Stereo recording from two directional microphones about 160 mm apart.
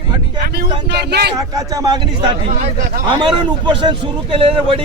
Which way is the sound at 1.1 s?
90° right.